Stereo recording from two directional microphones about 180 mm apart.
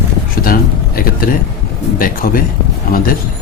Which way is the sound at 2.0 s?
50° left (ahead or behind).